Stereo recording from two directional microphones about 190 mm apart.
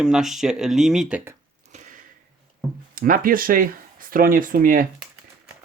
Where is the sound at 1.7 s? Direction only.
40° right (ahead or behind).